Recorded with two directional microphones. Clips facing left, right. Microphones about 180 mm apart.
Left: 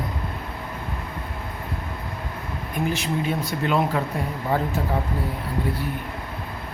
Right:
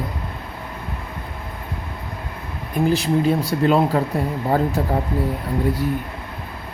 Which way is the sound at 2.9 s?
35° right (ahead or behind).